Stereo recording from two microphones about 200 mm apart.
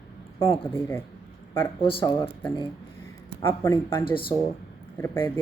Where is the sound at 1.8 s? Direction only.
25° left (ahead or behind).